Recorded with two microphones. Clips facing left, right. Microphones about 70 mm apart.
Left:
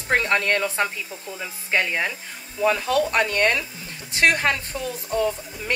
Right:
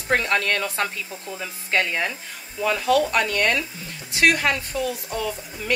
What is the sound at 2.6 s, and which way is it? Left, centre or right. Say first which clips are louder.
Speech: even; left.